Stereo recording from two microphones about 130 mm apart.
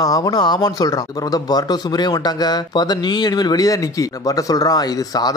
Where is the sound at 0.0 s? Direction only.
25° left (ahead or behind).